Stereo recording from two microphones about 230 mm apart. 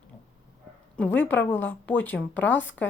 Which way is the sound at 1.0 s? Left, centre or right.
Centre.